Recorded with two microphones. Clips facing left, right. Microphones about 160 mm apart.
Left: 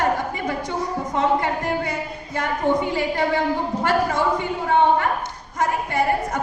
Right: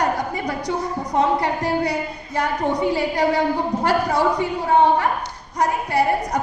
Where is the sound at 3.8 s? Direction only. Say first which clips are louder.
Right 1 dB; 35° right (ahead or behind).